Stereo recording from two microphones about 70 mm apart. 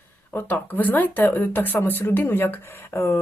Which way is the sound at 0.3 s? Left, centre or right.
Left.